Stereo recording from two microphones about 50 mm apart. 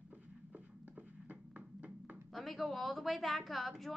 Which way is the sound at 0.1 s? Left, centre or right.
Right.